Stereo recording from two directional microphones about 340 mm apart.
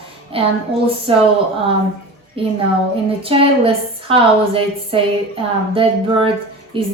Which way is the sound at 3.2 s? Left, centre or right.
Centre.